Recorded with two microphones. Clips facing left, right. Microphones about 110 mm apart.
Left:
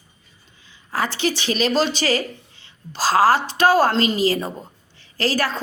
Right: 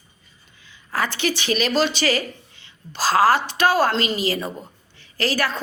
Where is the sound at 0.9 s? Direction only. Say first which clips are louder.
Left 1 dB; 30° left (ahead or behind).